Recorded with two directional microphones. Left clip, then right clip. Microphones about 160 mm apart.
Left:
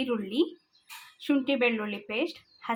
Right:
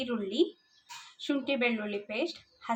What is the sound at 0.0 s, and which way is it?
Speech, 35° left (ahead or behind).